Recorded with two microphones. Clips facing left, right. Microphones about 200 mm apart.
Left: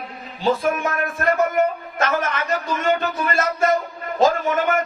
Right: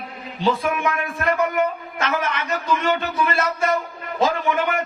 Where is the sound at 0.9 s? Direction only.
45° left (ahead or behind).